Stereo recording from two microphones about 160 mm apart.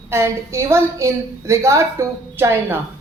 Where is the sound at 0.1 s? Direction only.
15° right (ahead or behind).